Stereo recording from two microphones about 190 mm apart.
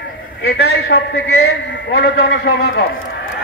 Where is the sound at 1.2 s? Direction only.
90° left; by 2.8 s 55° left (ahead or behind).